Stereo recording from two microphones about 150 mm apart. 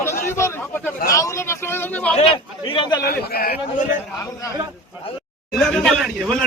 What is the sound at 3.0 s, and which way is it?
Speech, 85° left.